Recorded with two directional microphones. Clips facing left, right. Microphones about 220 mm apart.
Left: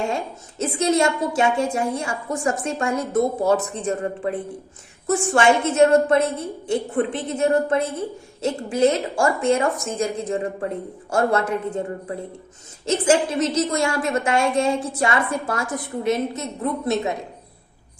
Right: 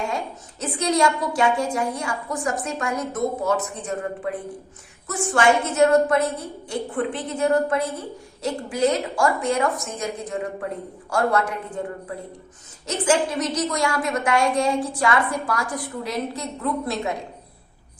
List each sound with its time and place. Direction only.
0.6 s a woman's voice: 25° left (ahead or behind)
12.8 s a woman's voice: 25° left (ahead or behind)